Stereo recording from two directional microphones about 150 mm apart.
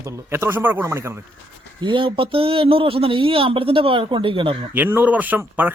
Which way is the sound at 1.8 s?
35° right (ahead or behind).